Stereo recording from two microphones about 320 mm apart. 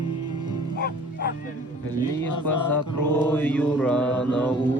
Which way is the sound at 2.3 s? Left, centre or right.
Left.